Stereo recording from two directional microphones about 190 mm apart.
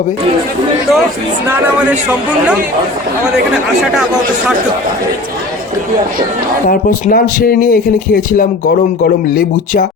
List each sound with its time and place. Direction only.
1.5 s speech: 10° right (ahead or behind)
6.7 s speech: 50° left (ahead or behind)